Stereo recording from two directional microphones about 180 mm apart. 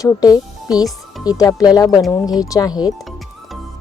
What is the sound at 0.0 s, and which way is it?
Speech, 20° left (ahead or behind).